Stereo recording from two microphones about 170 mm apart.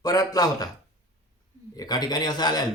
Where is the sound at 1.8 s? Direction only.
25° left (ahead or behind).